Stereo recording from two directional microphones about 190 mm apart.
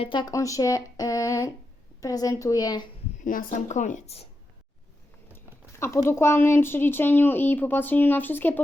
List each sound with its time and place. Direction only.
0.0 s a woman's voice: 25° left (ahead or behind)
3.2 s a woman's voice: 40° left (ahead or behind)
5.8 s speech: 15° left (ahead or behind)